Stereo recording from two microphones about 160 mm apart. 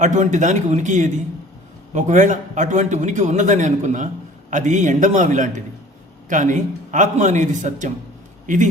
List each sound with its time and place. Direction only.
0.0 s a man's voice: 50° right (ahead or behind)